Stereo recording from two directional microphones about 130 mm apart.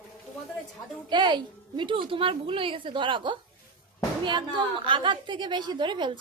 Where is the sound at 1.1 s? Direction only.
35° right (ahead or behind).